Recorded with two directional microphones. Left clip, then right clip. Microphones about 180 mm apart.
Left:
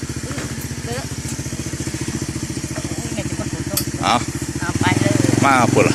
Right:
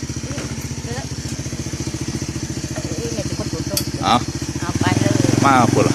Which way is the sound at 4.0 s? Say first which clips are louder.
Right 1 dB; 5° right (ahead or behind).